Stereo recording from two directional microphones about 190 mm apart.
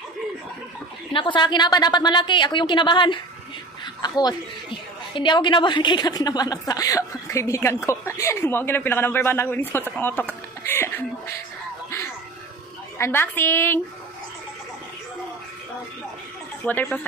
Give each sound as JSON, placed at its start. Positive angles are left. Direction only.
{"t": 1.1, "sound": "a woman's voice", "side_deg": 25}
{"t": 12.9, "sound": "a woman's voice", "side_deg": 10}
{"t": 16.6, "sound": "a woman's voice", "side_deg": 10}